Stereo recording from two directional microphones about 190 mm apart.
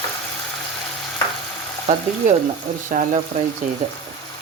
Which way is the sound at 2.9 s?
45° right (ahead or behind).